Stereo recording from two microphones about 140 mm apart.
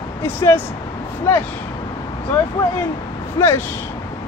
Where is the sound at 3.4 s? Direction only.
25° left (ahead or behind).